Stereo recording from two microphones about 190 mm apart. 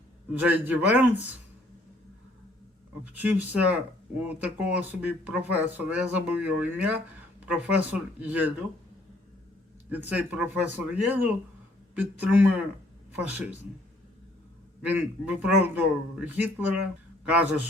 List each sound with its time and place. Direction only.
0.3 s speech: 10° right (ahead or behind)
3.0 s speech: 10° right (ahead or behind)
9.9 s speech: 10° right (ahead or behind)
14.8 s speech: 5° right (ahead or behind)